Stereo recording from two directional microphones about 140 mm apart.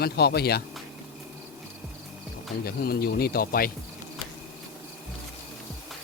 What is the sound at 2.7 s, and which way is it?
Speech, 90° left.